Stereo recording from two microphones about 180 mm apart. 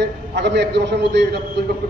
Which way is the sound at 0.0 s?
70° right (ahead or behind).